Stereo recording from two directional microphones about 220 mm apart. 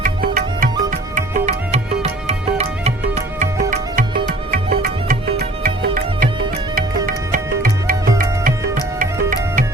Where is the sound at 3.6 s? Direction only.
40° right (ahead or behind).